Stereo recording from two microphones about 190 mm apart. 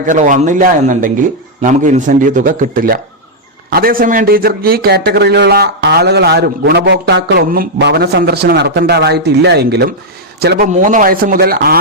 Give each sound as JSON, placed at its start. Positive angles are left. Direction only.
{"t": 0.1, "sound": "a man's voice", "side_deg": -40}
{"t": 10.7, "sound": "a man's voice", "side_deg": -40}